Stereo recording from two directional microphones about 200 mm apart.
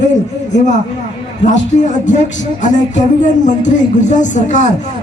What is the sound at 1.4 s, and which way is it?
Music, 35° left (ahead or behind).